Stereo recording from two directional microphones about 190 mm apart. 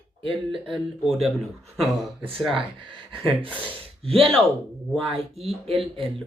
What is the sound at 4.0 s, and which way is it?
Speech, 30° right (ahead or behind).